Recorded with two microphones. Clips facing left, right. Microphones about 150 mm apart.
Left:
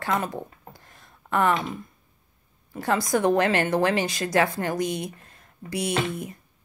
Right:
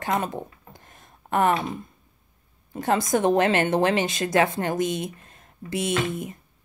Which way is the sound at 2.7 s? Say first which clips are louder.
Right 1 dB; 20° right (ahead or behind).